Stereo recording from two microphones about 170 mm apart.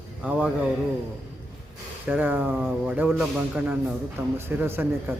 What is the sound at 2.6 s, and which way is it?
A man's voice, centre (ahead or behind).